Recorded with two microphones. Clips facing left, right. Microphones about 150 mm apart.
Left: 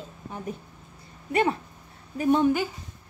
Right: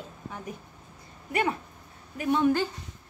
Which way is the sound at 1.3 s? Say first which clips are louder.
Left 4 dB; 30° left (ahead or behind).